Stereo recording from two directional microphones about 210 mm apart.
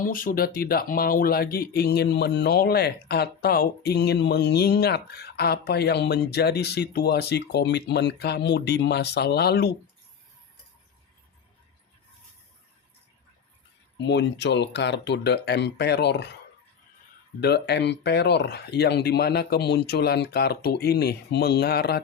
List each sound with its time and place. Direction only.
0.0 s speech: 40° left (ahead or behind)
14.0 s speech: 55° left (ahead or behind)
17.4 s speech: 50° left (ahead or behind)